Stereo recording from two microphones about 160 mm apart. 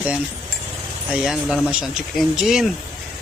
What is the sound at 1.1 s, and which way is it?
Speech, 5° right (ahead or behind).